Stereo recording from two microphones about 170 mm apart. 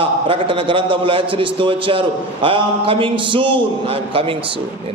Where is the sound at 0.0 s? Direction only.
30° right (ahead or behind).